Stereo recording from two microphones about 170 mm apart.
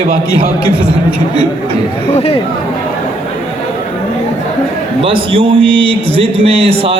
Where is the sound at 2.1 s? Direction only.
35° left (ahead or behind).